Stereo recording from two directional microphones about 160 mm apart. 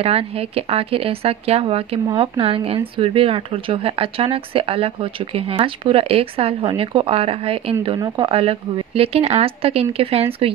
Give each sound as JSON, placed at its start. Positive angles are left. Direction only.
{"t": 0.0, "sound": "a woman's voice", "side_deg": -40}